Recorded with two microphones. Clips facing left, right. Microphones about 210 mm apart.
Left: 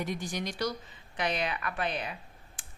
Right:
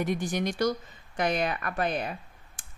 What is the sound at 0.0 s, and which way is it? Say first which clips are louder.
Speech: right 6 dB; 55° right (ahead or behind).